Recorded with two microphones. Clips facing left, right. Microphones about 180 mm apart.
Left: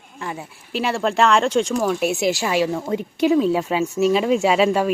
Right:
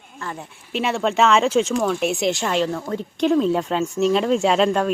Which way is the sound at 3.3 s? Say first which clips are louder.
Even; centre (ahead or behind).